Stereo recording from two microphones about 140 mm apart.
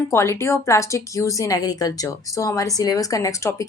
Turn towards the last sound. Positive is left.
turn(degrees=20)  # may be behind; listen again after turning